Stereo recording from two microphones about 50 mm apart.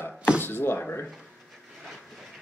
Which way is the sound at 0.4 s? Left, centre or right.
Left.